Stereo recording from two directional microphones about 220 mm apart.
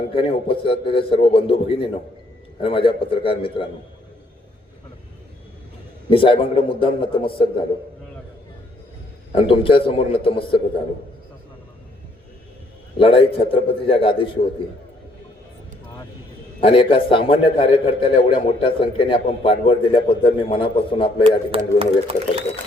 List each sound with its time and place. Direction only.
0.1 s a man's voice: 25° left (ahead or behind)
6.1 s a man's voice: 25° left (ahead or behind)
9.3 s a man's voice: 25° left (ahead or behind)
13.0 s a man's voice: 25° left (ahead or behind)
16.6 s a man's voice: 25° left (ahead or behind)
21.5 s speech: 25° right (ahead or behind)